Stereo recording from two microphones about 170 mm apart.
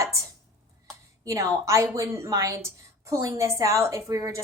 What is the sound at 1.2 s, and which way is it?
A woman's voice, 20° right (ahead or behind).